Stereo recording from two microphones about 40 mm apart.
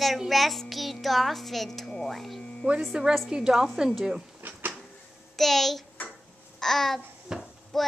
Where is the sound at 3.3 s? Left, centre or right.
Centre.